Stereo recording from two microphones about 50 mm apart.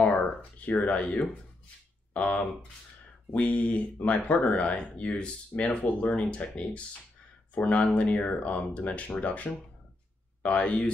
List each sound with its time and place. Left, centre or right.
0.0 s speech: left
2.1 s speech: left